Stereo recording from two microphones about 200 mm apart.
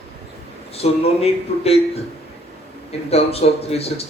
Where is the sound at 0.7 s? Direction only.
30° left (ahead or behind).